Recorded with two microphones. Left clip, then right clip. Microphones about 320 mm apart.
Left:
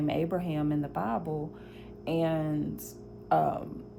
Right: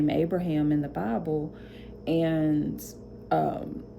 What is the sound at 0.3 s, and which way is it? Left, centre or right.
Speech, centre.